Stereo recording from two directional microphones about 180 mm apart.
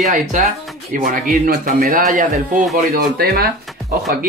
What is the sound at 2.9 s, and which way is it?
Speech, 60° right (ahead or behind).